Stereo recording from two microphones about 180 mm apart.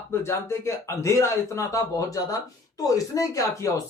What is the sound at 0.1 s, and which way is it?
Speech, 15° left (ahead or behind).